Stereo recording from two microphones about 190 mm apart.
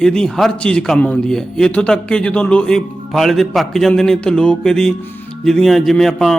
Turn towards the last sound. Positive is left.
turn(degrees=0)  # may be behind; listen again after turning